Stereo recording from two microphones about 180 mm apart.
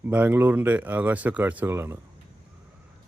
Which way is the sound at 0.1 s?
10° right (ahead or behind).